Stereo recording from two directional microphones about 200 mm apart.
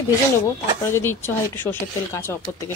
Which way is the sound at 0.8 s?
10° left (ahead or behind).